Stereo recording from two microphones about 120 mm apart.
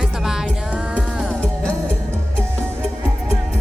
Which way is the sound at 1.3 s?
10° left (ahead or behind).